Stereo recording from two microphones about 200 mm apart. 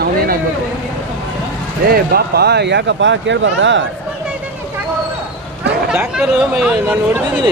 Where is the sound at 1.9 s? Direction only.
50° right (ahead or behind); by 3.8 s 65° right (ahead or behind).